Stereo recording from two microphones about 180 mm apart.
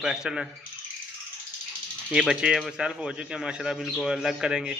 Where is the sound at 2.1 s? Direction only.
5° right (ahead or behind).